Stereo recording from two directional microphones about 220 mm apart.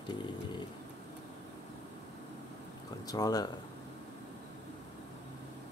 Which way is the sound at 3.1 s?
15° left (ahead or behind).